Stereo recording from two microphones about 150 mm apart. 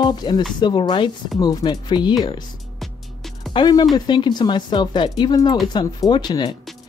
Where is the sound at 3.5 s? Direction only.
30° left (ahead or behind).